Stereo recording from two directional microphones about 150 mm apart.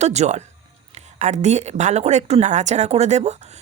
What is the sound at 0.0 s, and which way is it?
Speech, 50° right (ahead or behind).